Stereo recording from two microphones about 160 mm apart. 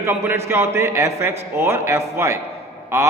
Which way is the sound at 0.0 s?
15° right (ahead or behind).